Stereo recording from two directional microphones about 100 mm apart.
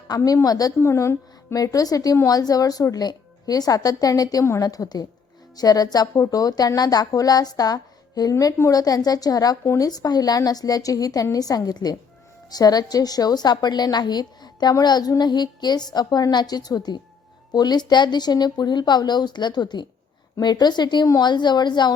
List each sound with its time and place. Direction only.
0.1 s a woman's voice: 45° left (ahead or behind)
0.8 s a woman's voice: 30° left (ahead or behind); by 21.9 s 45° left (ahead or behind)